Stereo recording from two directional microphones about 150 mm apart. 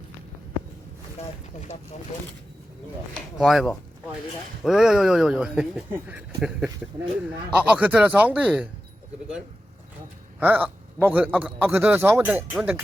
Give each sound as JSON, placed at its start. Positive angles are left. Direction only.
{"t": 1.7, "sound": "speech", "side_deg": 15}
{"t": 3.3, "sound": "a man's voice", "side_deg": 0}
{"t": 10.4, "sound": "a man's voice", "side_deg": -10}